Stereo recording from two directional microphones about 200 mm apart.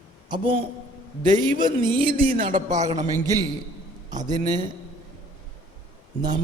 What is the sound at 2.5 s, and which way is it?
Speech, 40° right (ahead or behind).